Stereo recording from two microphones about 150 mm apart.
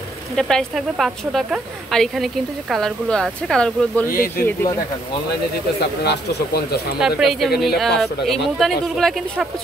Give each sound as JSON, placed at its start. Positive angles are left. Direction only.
{"t": 0.4, "sound": "speech", "side_deg": 5}
{"t": 4.4, "sound": "speech", "side_deg": 15}
{"t": 6.0, "sound": "speech", "side_deg": 90}
{"t": 7.0, "sound": "speech", "side_deg": -5}